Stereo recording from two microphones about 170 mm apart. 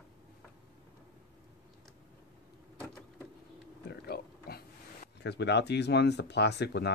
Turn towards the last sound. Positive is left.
turn(degrees=80)